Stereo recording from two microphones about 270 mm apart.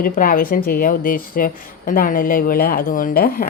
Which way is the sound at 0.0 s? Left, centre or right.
Left.